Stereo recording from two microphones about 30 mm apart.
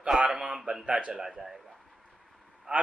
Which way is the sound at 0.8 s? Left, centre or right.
Right.